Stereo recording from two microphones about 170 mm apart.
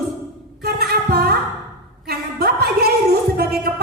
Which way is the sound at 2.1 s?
65° right (ahead or behind).